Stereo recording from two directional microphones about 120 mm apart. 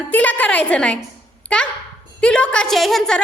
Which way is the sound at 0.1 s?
10° left (ahead or behind).